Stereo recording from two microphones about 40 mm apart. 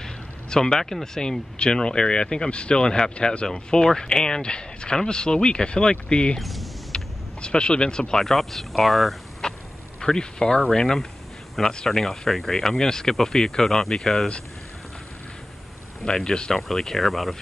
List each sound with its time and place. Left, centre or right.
0.0 s speech: centre
6.4 s speech: centre
6.9 s vehicle: left
7.4 s speech: left
8.3 s speech: centre
9.4 s a sound: centre
9.9 s speech: centre
16.1 s speech: centre